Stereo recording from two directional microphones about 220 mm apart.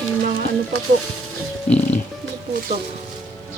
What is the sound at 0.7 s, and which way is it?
Speech, 80° right.